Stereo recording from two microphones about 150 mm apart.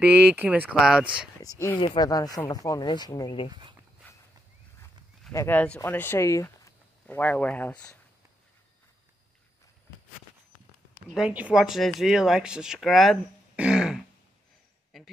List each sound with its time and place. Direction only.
0.0 s speech: 10° right (ahead or behind)
1.4 s speech: 20° left (ahead or behind)
5.3 s speech: 20° left (ahead or behind)
11.1 s speech: 5° right (ahead or behind)
14.9 s a sound: centre (ahead or behind)